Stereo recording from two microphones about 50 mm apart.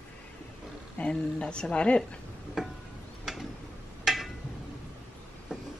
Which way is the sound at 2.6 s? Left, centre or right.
Centre.